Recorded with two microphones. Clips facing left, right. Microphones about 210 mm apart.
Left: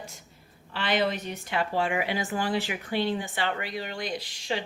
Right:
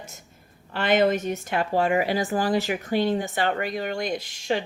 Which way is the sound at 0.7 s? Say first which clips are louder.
Right 6 dB; 50° right (ahead or behind).